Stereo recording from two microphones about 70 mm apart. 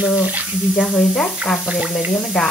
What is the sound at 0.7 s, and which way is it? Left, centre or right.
Speech, centre.